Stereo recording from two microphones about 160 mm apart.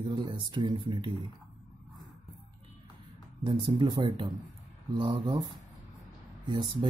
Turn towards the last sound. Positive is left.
turn(degrees=-30)  # may be behind; listen again after turning